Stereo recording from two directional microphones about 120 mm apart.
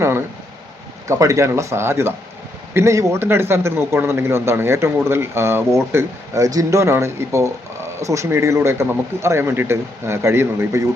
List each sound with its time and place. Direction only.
1.0 s a man's voice: 25° right (ahead or behind)